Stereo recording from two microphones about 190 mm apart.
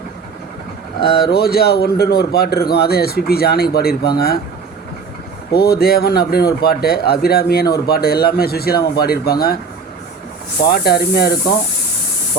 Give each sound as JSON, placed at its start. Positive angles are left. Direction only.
{"t": 1.0, "sound": "speech", "side_deg": 55}
{"t": 5.5, "sound": "speech", "side_deg": 55}
{"t": 10.6, "sound": "speech", "side_deg": 60}